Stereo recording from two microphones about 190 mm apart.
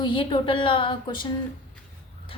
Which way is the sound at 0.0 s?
25° left (ahead or behind).